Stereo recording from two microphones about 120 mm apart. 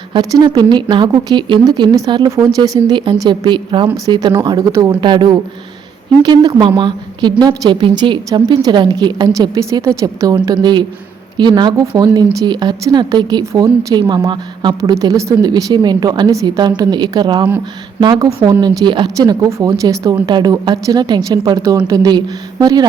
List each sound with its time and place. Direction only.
0.1 s a woman's voice: 35° right (ahead or behind)
3.0 s a woman's voice: 40° right (ahead or behind)